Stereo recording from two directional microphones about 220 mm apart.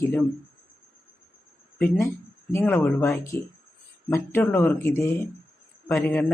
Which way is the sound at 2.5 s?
10° left (ahead or behind).